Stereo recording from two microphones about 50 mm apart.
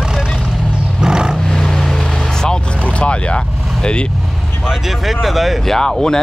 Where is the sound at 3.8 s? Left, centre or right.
Left.